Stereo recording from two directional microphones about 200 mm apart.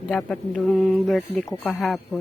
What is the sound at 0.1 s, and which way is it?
Speech, 5° left (ahead or behind).